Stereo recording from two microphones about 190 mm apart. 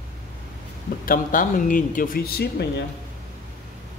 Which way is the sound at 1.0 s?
45° left (ahead or behind).